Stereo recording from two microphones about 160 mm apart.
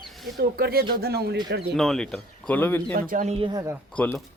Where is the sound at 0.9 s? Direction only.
80° right.